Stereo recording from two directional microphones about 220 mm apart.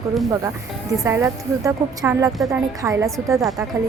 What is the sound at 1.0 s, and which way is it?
A woman's voice, 15° right (ahead or behind).